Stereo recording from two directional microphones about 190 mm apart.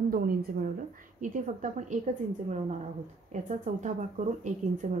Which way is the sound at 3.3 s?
40° right (ahead or behind).